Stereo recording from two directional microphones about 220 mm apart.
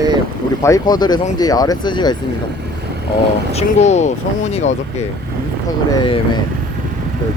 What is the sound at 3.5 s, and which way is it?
Speech, 30° left (ahead or behind).